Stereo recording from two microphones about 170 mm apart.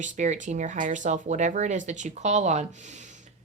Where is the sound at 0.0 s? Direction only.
45° right (ahead or behind).